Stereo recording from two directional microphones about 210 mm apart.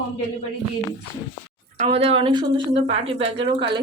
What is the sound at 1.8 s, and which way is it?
Speech, 30° right (ahead or behind).